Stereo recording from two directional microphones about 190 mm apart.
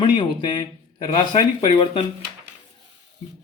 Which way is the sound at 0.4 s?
25° left (ahead or behind).